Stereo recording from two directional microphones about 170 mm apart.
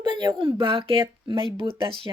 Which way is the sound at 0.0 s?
25° right (ahead or behind).